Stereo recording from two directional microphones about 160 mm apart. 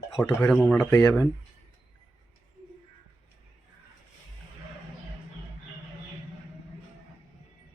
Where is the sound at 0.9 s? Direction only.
15° left (ahead or behind).